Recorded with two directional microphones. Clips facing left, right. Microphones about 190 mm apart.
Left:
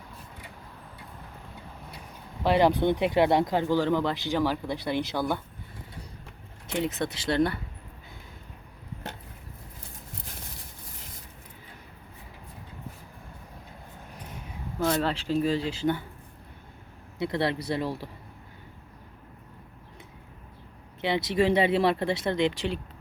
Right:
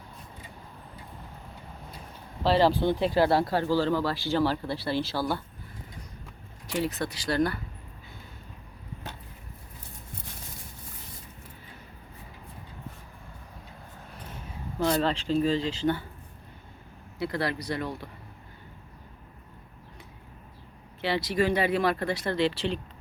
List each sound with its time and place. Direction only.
2.4 s speech: 15° left (ahead or behind)
6.7 s speech: 20° left (ahead or behind)
14.8 s speech: 5° left (ahead or behind)
17.2 s speech: 25° left (ahead or behind)
21.0 s speech: 20° left (ahead or behind)